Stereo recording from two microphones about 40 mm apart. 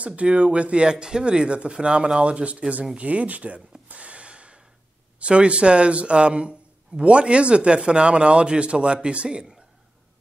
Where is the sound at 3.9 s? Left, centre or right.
Right.